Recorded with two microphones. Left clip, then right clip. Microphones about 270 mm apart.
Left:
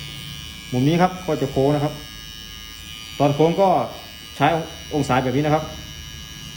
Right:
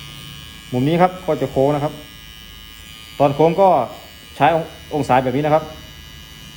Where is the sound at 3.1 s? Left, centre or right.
Right.